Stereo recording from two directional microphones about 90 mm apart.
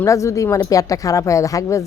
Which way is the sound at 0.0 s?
35° left (ahead or behind).